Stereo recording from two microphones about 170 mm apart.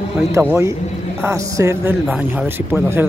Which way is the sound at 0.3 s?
15° right (ahead or behind).